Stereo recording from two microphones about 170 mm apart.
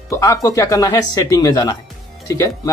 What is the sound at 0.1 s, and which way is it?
Speech, 20° left (ahead or behind).